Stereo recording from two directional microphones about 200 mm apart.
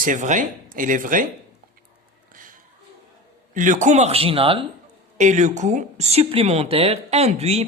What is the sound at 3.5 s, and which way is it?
Speech, 40° right (ahead or behind).